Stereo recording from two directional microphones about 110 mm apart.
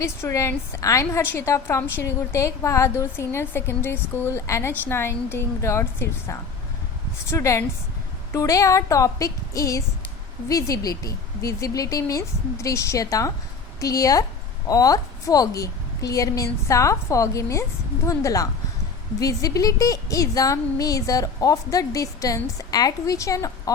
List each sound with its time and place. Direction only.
0.0 s a woman's voice: 25° left (ahead or behind)